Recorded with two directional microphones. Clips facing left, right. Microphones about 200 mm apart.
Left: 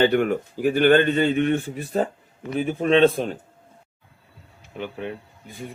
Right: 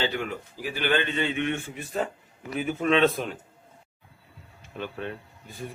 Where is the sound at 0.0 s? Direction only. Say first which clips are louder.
Left 10 dB; 55° left (ahead or behind); by 3.3 s 30° left (ahead or behind).